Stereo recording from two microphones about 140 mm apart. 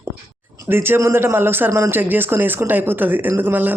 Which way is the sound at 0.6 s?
15° right (ahead or behind).